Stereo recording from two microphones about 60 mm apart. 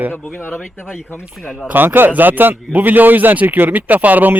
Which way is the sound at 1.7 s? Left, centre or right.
Right.